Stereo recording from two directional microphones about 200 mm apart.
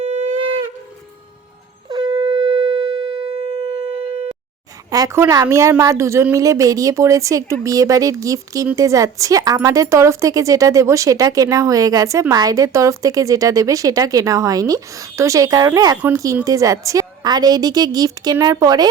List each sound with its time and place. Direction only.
0.0 s shofar: 35° right (ahead or behind)
1.9 s shofar: 20° right (ahead or behind)
4.9 s a woman's voice: 15° right (ahead or behind)